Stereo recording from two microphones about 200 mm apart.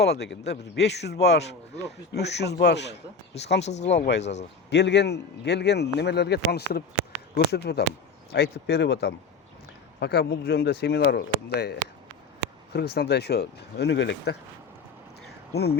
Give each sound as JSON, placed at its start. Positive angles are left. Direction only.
{"t": 0.0, "sound": "a man's voice", "side_deg": 55}
{"t": 4.2, "sound": "speech", "side_deg": 35}
{"t": 4.7, "sound": "a man's voice", "side_deg": 60}
{"t": 15.3, "sound": "a sound", "side_deg": 55}